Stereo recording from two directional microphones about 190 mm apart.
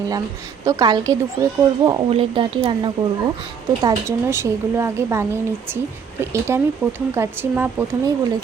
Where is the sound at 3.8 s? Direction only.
15° right (ahead or behind).